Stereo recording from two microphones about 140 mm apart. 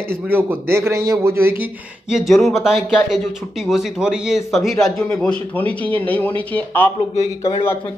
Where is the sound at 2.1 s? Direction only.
Centre (ahead or behind).